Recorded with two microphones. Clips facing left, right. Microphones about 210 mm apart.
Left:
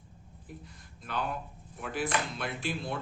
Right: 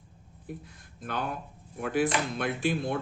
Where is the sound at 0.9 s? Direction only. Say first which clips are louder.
Right 2 dB; 50° right (ahead or behind).